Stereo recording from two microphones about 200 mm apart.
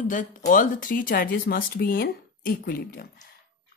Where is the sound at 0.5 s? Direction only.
40° left (ahead or behind).